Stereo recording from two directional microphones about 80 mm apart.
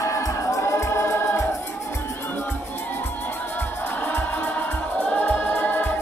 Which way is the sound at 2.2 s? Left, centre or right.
Left.